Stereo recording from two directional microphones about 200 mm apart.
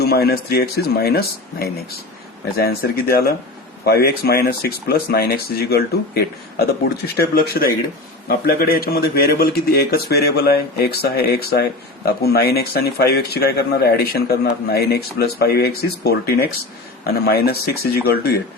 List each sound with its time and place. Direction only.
0.0 s a man's voice: 50° left (ahead or behind)